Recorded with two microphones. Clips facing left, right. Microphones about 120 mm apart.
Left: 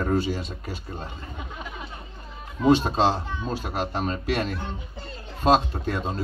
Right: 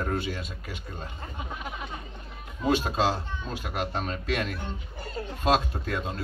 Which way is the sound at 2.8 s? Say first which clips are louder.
Left 4 dB; 40° left (ahead or behind).